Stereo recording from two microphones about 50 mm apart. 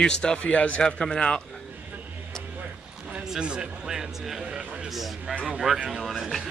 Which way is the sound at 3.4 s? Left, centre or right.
Centre.